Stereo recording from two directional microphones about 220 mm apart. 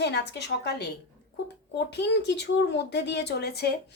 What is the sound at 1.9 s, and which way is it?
Speech, 50° left (ahead or behind).